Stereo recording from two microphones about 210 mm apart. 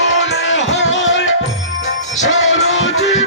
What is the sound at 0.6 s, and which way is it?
Music, 30° left (ahead or behind).